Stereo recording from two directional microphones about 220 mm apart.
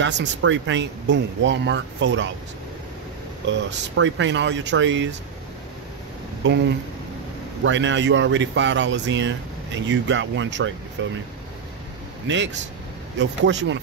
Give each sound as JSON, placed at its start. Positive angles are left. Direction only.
{"t": 0.0, "sound": "speech", "side_deg": -55}
{"t": 3.4, "sound": "speech", "side_deg": -55}
{"t": 6.4, "sound": "speech", "side_deg": -55}
{"t": 7.6, "sound": "speech", "side_deg": -55}
{"t": 13.2, "sound": "speech", "side_deg": -55}